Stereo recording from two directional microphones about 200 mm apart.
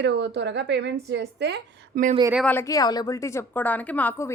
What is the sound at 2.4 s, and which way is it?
A woman's voice, 15° left (ahead or behind).